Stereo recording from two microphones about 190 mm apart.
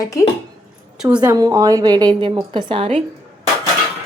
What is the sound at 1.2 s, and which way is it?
A woman's voice, 20° right (ahead or behind).